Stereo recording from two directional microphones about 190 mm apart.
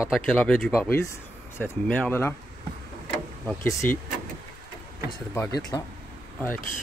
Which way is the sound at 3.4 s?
10° left (ahead or behind).